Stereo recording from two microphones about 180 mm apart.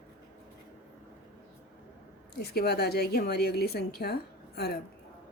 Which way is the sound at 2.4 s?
65° left (ahead or behind).